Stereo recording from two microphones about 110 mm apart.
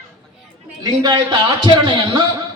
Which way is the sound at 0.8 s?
40° right (ahead or behind).